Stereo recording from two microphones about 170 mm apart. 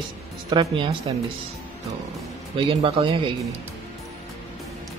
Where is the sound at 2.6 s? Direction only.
30° right (ahead or behind).